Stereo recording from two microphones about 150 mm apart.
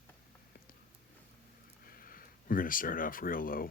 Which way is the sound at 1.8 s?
75° left (ahead or behind).